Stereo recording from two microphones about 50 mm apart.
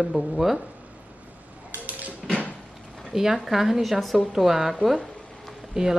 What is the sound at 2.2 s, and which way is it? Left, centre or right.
Door, centre.